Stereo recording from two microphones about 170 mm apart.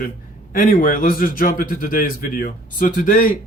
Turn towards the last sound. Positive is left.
turn(degrees=55)  # may be behind; listen again after turning